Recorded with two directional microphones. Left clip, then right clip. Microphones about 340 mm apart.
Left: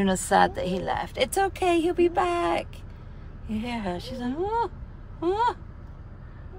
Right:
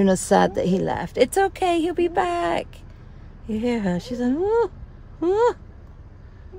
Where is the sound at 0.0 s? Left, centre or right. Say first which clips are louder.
Right 3 dB; right.